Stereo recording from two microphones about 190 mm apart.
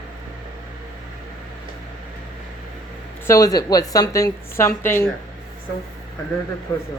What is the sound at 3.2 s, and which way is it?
A woman's voice, 15° left (ahead or behind).